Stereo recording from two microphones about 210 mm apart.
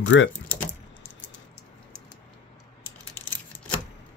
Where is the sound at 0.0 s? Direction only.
65° left (ahead or behind).